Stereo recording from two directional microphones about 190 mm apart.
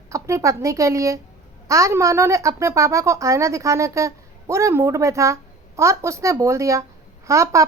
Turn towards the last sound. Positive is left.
turn(degrees=-15)  # may be behind; listen again after turning